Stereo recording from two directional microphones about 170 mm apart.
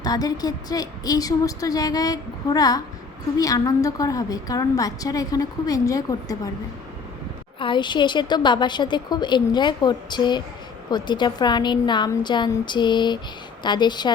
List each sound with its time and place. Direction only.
0.0 s a woman's voice: 20° left (ahead or behind)
7.6 s a woman's voice: 30° left (ahead or behind)